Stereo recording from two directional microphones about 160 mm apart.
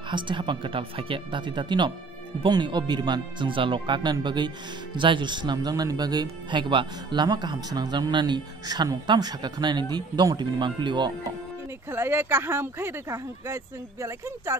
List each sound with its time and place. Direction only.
0.1 s speech: 30° right (ahead or behind)
11.9 s speech: 15° right (ahead or behind)